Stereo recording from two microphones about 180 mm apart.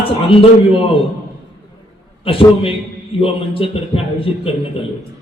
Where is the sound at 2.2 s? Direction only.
30° left (ahead or behind).